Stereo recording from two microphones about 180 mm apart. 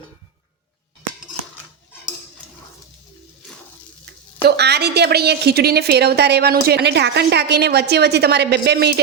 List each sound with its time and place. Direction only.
4.4 s a woman's voice: 65° right (ahead or behind)